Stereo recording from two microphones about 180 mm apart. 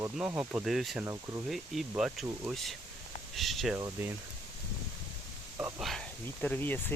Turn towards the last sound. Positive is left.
turn(degrees=10)  # may be behind; listen again after turning